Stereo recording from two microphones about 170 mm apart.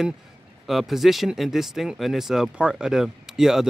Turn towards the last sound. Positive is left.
turn(degrees=-5)  # may be behind; listen again after turning